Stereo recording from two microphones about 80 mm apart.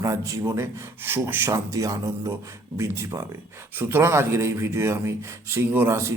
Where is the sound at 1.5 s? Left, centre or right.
Right.